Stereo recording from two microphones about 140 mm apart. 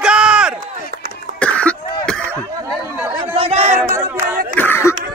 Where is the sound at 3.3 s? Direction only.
45° right (ahead or behind).